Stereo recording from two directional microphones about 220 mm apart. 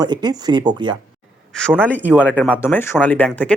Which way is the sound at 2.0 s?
5° right (ahead or behind).